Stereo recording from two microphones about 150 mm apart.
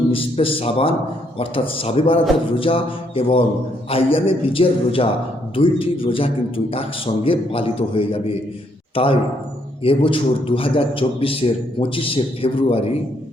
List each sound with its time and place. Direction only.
0.1 s a man's voice: 40° left (ahead or behind)